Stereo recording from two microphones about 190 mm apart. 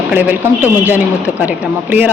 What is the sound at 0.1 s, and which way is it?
Speech, 10° right (ahead or behind).